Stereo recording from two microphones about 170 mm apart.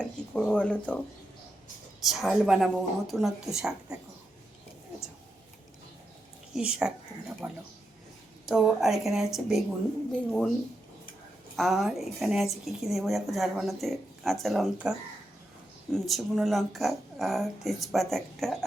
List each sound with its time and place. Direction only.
0.0 s speech: 5° left (ahead or behind)
2.0 s a woman's voice: centre (ahead or behind)
6.5 s a woman's voice: 5° right (ahead or behind)
11.5 s a woman's voice: centre (ahead or behind)